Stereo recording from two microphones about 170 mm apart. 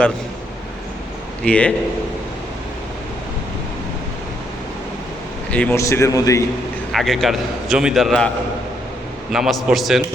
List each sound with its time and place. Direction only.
1.5 s a man's voice: 5° left (ahead or behind)
5.5 s a man's voice: 10° left (ahead or behind)
6.9 s a man's voice: centre (ahead or behind)
9.3 s a man's voice: centre (ahead or behind)